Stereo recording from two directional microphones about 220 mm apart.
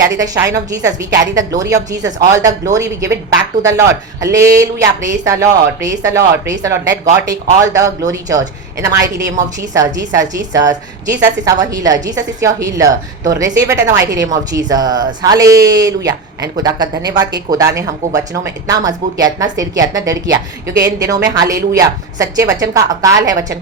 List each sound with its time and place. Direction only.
0.2 s a woman's voice: 15° right (ahead or behind)